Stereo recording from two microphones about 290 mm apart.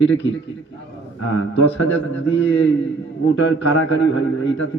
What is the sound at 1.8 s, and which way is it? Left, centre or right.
A man's voice, left.